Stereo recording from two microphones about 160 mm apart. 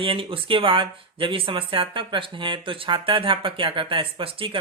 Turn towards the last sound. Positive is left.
turn(degrees=-35)  # may be behind; listen again after turning